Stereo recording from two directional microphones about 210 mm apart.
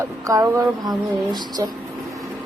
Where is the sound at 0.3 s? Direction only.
15° right (ahead or behind).